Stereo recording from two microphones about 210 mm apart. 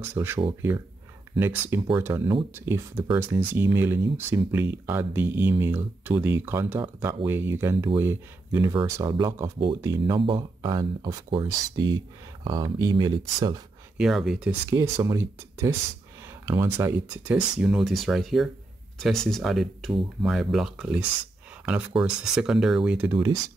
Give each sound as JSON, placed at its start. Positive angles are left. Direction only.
{"t": 0.0, "sound": "speech", "side_deg": -10}
{"t": 13.9, "sound": "speech", "side_deg": 0}
{"t": 14.7, "sound": "speech", "side_deg": -15}
{"t": 23.1, "sound": "speech", "side_deg": -20}